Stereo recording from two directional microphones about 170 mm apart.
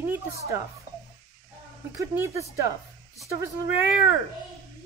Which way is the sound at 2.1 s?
15° right (ahead or behind).